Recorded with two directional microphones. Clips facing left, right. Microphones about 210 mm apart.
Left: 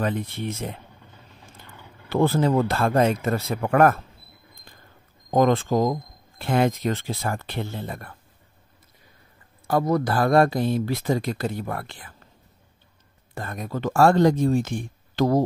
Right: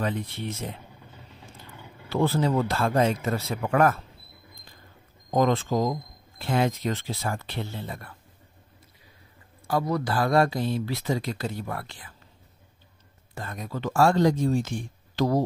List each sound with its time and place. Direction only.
0.0 s speech: 50° left (ahead or behind)
2.0 s speech: 55° left (ahead or behind)
5.3 s speech: 55° left (ahead or behind)
9.7 s speech: 50° left (ahead or behind)
13.3 s speech: 55° left (ahead or behind)